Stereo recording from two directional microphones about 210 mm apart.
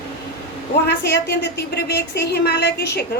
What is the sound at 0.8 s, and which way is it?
A woman's voice, 50° left (ahead or behind).